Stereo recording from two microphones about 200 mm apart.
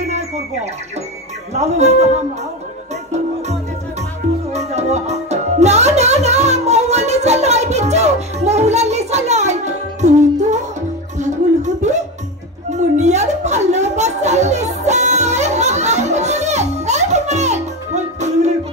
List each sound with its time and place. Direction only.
1.5 s speech: 35° right (ahead or behind)
4.5 s music: 35° right (ahead or behind)
11.1 s a sound: 35° right (ahead or behind)